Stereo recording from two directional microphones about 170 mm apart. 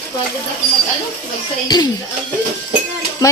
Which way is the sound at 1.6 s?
25° left (ahead or behind).